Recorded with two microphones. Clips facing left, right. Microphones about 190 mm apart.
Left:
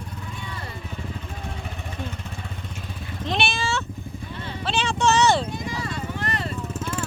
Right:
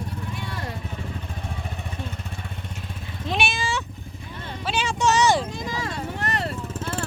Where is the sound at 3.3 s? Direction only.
10° right (ahead or behind).